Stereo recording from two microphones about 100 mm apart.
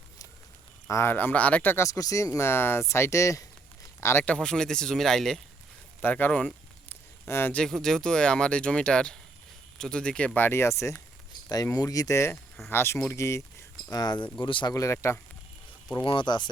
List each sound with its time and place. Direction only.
0.9 s speech: 30° left (ahead or behind)
1.1 s speech: 15° left (ahead or behind)
1.9 s speech: 35° left (ahead or behind)
4.3 s speech: 5° left (ahead or behind)
6.0 s a sound: 20° left (ahead or behind)
7.5 s speech: 5° left (ahead or behind); by 13.4 s 30° left (ahead or behind)
13.9 s speech: 45° left (ahead or behind)
14.7 s speech: 35° left (ahead or behind)
16.0 s speech: 50° left (ahead or behind)